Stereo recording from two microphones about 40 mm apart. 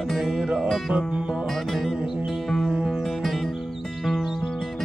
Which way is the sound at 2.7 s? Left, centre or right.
Centre.